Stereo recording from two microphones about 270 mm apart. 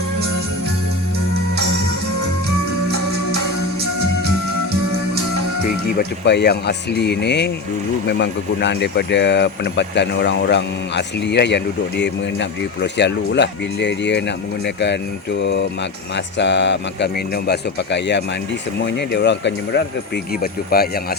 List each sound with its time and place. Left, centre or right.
6.0 s speech: left